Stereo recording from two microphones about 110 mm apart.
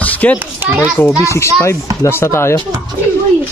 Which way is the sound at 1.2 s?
25° left (ahead or behind).